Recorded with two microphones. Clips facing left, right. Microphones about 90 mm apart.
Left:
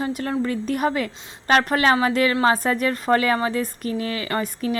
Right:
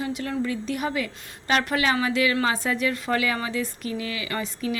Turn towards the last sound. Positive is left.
turn(degrees=45)  # may be behind; listen again after turning